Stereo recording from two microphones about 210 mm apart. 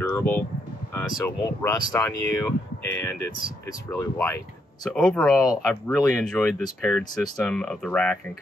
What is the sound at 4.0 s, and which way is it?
Speech, 10° left (ahead or behind).